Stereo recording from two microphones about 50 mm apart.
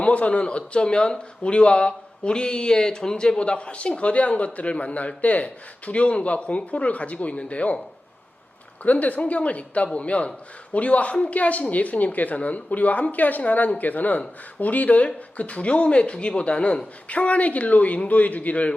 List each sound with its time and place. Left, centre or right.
0.0 s speech: left
8.8 s speech: left